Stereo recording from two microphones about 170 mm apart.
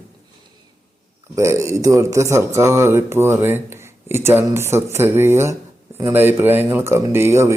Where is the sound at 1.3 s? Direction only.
15° right (ahead or behind).